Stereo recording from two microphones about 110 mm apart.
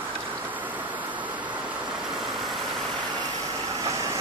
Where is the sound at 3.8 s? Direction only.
30° right (ahead or behind).